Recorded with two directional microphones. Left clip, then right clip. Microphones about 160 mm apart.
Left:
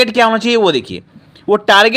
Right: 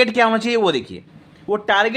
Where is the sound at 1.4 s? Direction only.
35° left (ahead or behind).